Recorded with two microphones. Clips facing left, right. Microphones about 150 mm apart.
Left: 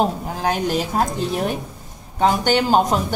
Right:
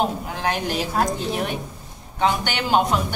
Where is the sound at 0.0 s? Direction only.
35° left (ahead or behind).